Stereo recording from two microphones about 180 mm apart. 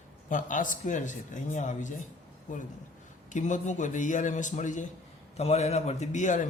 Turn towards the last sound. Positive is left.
turn(degrees=45)  # may be behind; listen again after turning